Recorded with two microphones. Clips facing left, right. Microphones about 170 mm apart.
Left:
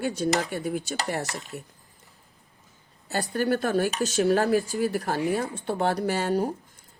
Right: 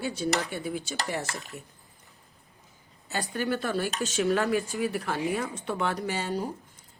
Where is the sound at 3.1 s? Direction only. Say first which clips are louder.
Left 4 dB; 40° left (ahead or behind).